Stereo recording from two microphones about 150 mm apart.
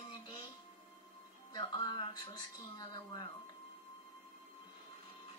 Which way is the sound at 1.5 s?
25° left (ahead or behind).